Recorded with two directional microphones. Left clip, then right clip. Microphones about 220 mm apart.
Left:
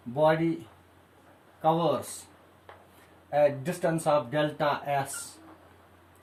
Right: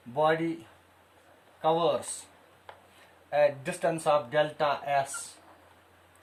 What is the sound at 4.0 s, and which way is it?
Speech, 15° right (ahead or behind).